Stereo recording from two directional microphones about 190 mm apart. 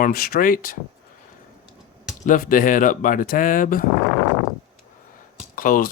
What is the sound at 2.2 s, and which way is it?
Speech, 45° left (ahead or behind).